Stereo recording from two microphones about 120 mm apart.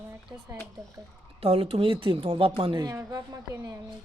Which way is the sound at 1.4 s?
50° right (ahead or behind).